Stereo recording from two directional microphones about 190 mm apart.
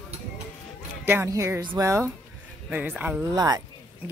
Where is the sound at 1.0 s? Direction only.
10° right (ahead or behind).